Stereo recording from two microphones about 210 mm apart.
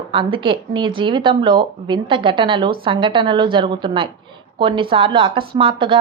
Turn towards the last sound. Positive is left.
turn(degrees=-25)  # may be behind; listen again after turning